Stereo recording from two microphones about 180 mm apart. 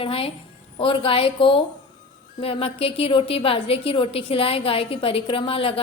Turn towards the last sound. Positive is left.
turn(degrees=30)  # may be behind; listen again after turning